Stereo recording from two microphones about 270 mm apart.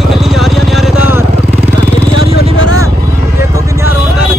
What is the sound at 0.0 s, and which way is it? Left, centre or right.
Vehicle, centre.